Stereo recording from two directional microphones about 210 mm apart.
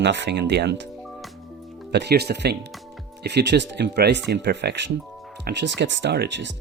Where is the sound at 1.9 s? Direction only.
50° right (ahead or behind).